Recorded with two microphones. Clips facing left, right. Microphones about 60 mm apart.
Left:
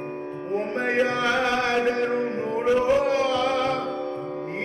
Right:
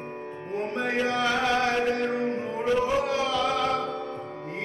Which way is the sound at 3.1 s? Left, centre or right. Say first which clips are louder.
Left 3 dB; left.